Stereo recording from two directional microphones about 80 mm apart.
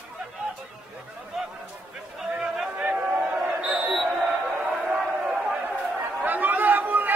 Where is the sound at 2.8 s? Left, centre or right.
Centre.